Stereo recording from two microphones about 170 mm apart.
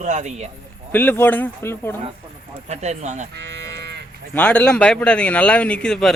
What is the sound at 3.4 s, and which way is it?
Cattle, 85° right.